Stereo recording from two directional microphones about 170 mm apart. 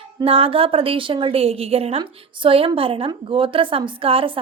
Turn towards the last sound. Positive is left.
turn(degrees=-35)  # may be behind; listen again after turning